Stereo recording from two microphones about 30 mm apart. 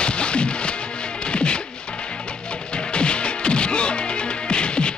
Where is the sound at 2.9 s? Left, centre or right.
Left.